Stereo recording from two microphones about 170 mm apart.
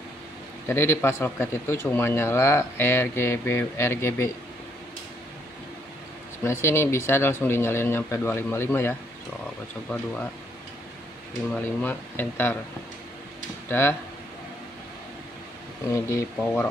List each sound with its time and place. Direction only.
0.7 s speech: 15° left (ahead or behind)
6.4 s speech: 15° left (ahead or behind)
11.5 s speech: 10° left (ahead or behind)
13.7 s speech: 10° left (ahead or behind)
15.9 s speech: 15° left (ahead or behind)